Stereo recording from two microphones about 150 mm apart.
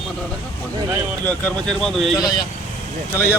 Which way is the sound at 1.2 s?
5° left (ahead or behind).